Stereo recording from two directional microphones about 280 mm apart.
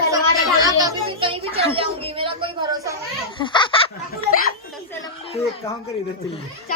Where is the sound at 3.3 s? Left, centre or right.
Centre.